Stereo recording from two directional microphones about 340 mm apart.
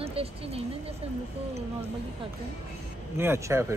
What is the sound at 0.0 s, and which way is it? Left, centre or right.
Speech, centre.